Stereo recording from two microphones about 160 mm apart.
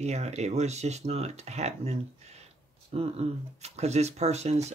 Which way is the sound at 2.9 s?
40° right (ahead or behind).